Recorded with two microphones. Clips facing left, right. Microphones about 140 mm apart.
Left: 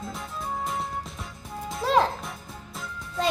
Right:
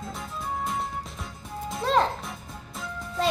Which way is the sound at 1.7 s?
Centre (ahead or behind).